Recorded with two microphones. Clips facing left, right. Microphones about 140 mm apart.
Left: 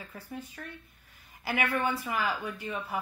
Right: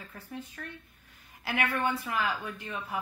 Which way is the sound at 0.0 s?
5° left (ahead or behind).